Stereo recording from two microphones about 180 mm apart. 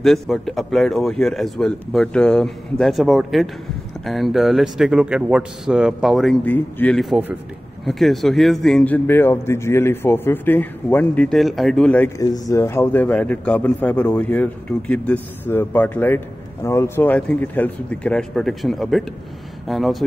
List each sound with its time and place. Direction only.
0.0 s a man's voice: centre (ahead or behind)
12.2 s a man's voice: 20° left (ahead or behind); by 20.0 s centre (ahead or behind)